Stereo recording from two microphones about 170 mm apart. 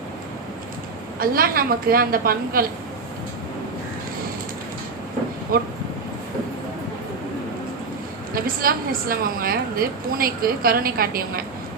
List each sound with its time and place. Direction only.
1.2 s a woman's voice: 60° right (ahead or behind)
5.5 s a woman's voice: 60° right (ahead or behind)
8.3 s a woman's voice: 60° right (ahead or behind)